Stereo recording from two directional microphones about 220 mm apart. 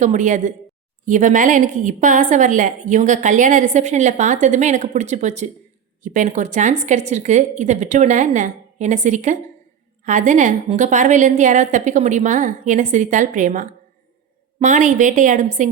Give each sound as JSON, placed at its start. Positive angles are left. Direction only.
{"t": 0.0, "sound": "a woman's voice", "side_deg": -35}